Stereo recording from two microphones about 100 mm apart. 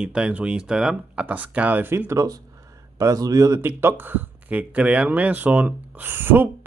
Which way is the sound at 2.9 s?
35° right (ahead or behind).